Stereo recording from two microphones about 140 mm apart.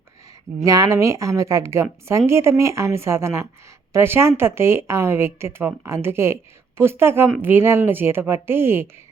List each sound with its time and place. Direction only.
0.6 s speech: 25° right (ahead or behind)